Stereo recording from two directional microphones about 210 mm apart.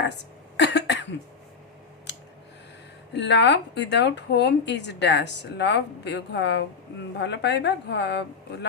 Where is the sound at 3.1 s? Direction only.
55° left (ahead or behind).